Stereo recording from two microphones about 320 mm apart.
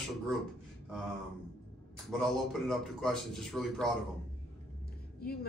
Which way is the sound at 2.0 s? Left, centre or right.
Centre.